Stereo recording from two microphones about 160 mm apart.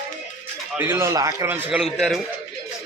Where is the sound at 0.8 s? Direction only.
15° right (ahead or behind).